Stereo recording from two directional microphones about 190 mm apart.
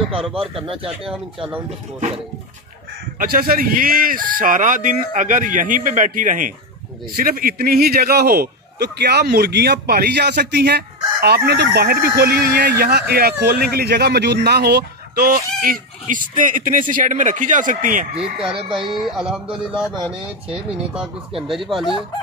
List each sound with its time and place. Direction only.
0.3 s speech: 30° right (ahead or behind)
3.2 s a man's voice: 50° right (ahead or behind)
18.1 s speech: 5° right (ahead or behind)